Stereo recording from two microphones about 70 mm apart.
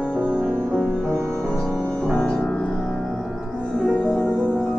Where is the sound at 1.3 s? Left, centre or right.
Centre.